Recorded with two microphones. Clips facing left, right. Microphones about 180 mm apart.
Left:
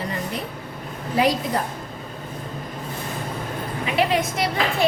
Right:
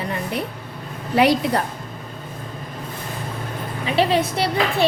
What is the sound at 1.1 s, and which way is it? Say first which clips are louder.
Speech: right 4 dB; 70° right (ahead or behind).